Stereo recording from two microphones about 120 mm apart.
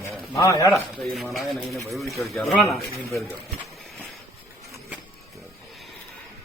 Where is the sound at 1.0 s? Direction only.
Centre (ahead or behind).